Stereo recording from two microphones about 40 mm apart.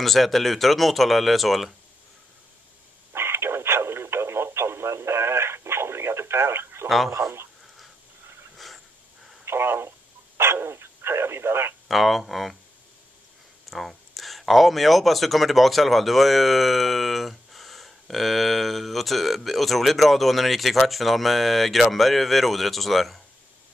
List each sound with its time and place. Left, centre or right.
0.0 s speech: centre
3.2 s radio: right
7.2 s speech: right
9.4 s radio: right
10.3 s a sound: right
11.9 s speech: centre
13.7 s speech: centre